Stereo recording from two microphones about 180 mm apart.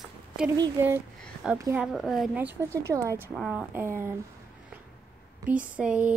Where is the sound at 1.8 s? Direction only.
Centre (ahead or behind).